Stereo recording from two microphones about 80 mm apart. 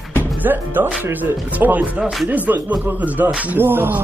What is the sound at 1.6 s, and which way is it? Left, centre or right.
Groan, centre.